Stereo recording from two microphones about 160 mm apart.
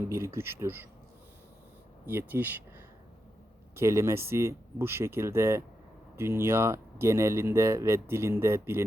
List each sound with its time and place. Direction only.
0.0 s speech: 15° right (ahead or behind)
2.0 s speech: 15° right (ahead or behind)